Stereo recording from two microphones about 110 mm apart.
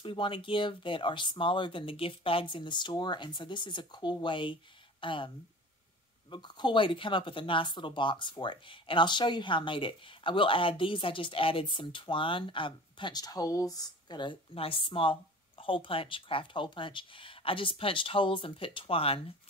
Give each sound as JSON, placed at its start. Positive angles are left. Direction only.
{"t": 0.0, "sound": "speech", "side_deg": 50}
{"t": 6.3, "sound": "speech", "side_deg": 45}